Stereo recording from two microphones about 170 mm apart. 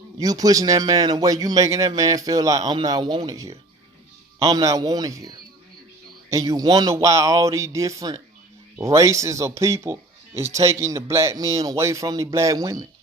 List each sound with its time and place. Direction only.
0.2 s speech: 20° right (ahead or behind)